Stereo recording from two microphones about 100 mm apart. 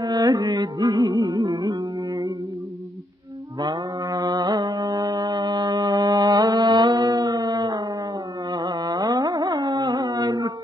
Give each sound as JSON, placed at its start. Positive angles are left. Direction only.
{"t": 0.0, "sound": "music", "side_deg": -40}
{"t": 3.5, "sound": "music", "side_deg": -40}
{"t": 8.5, "sound": "carnatic music", "side_deg": -40}